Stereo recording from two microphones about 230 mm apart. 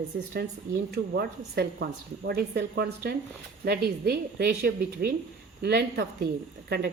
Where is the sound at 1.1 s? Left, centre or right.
Right.